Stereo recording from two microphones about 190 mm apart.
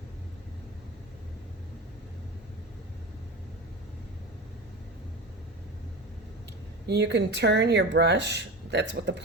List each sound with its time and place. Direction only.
6.8 s speech: 60° right (ahead or behind)